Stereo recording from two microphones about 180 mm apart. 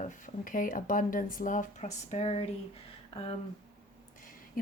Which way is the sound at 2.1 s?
35° left (ahead or behind).